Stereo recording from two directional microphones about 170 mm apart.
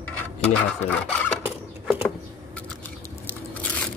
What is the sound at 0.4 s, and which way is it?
Speech, 5° left (ahead or behind).